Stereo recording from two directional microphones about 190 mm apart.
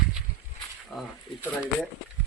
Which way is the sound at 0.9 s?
Centre (ahead or behind).